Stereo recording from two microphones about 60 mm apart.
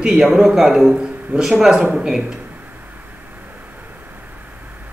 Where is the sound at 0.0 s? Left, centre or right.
Centre.